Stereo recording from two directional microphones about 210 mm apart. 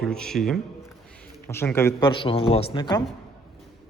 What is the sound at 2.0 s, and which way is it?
Speech, 25° left (ahead or behind).